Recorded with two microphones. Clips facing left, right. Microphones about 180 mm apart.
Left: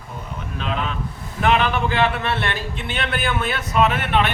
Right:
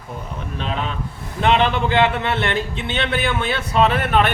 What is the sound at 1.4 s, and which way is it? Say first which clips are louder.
A man's voice: right 2 dB; 25° right (ahead or behind).